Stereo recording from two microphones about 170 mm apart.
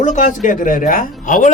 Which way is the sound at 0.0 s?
45° left (ahead or behind).